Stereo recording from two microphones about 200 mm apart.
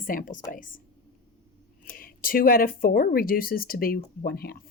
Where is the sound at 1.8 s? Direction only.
45° left (ahead or behind).